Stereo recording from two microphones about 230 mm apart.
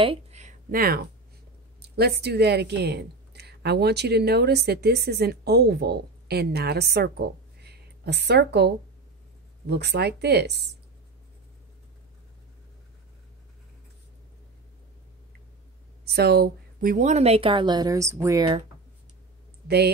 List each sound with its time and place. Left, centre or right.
0.0 s a sound: right
1.8 s a woman's voice: right
16.1 s a woman's voice: right; by 18.6 s centre